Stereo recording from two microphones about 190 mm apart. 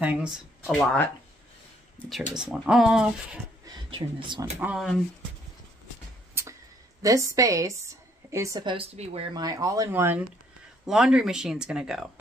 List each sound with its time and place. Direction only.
0.0 s speech: 5° right (ahead or behind)
3.6 s speech: 25° right (ahead or behind)
4.6 s speech: 5° right (ahead or behind)
6.4 s a sound: 10° right (ahead or behind)
7.0 s a woman's voice: 15° right (ahead or behind); by 9.3 s 35° right (ahead or behind)
9.3 s a woman's voice: 20° right (ahead or behind); by 12.1 s 5° right (ahead or behind)